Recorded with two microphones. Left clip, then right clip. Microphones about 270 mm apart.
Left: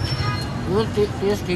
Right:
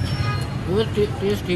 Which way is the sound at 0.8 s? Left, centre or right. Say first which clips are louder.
Even; left.